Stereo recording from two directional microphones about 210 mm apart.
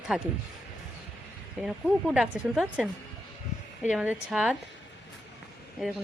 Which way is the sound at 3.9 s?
5° right (ahead or behind).